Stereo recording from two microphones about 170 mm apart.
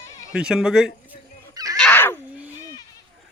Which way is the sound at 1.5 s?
20° right (ahead or behind).